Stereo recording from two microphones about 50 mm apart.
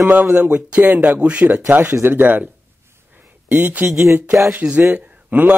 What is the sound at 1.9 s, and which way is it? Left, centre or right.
Speech, right.